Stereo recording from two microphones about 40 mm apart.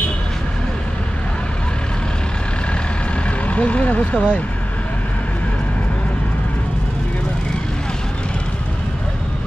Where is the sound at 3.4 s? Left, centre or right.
Left.